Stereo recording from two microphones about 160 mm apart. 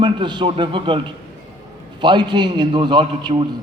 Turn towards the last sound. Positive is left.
turn(degrees=-30)  # may be behind; listen again after turning